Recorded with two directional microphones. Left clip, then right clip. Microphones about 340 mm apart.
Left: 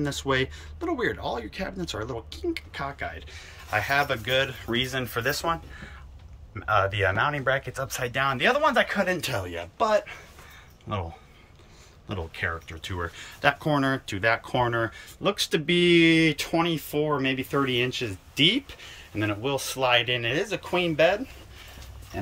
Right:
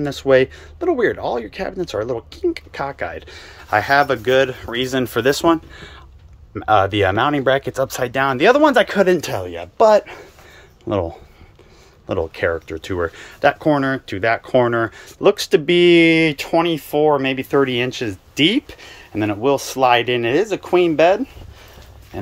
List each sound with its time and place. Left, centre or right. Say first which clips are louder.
0.0 s speech: right 12 dB; centre
12.1 s speech: right 11 dB; centre